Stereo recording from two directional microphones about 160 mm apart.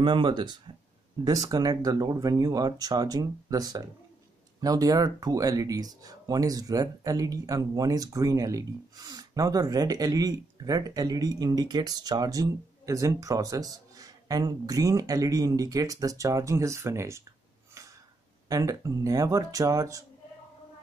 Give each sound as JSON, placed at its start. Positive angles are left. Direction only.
{"t": 0.0, "sound": "speech", "side_deg": -30}
{"t": 18.5, "sound": "speech", "side_deg": -20}